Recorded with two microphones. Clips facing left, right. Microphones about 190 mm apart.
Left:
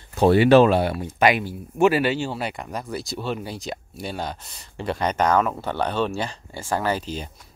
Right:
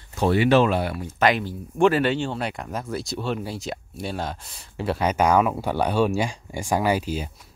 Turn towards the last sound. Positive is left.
turn(degrees=-10)  # may be behind; listen again after turning